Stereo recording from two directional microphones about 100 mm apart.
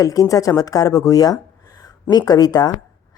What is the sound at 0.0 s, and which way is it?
A woman's voice, 35° left (ahead or behind).